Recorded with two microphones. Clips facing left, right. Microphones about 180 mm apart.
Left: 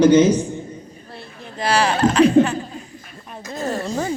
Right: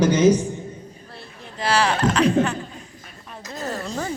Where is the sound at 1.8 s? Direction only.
30° left (ahead or behind).